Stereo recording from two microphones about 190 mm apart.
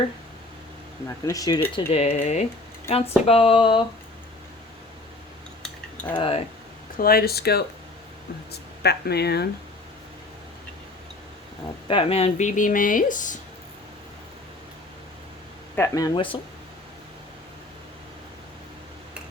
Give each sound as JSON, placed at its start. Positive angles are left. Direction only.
{"t": 1.0, "sound": "speech", "side_deg": 20}
{"t": 1.7, "sound": "speech", "side_deg": 30}
{"t": 6.1, "sound": "speech", "side_deg": 30}
{"t": 6.9, "sound": "speech", "side_deg": 50}
{"t": 8.8, "sound": "speech", "side_deg": 60}
{"t": 11.9, "sound": "speech", "side_deg": 30}
{"t": 15.7, "sound": "speech", "side_deg": 15}